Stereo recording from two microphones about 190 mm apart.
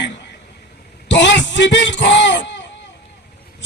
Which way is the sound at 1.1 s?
70° left (ahead or behind).